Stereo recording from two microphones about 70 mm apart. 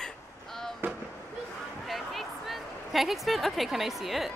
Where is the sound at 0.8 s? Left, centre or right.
Right.